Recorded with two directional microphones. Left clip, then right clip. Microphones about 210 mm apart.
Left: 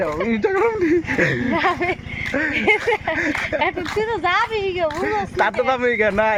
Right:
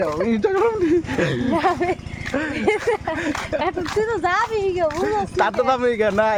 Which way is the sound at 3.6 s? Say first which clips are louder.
Left 1 dB; 20° right (ahead or behind).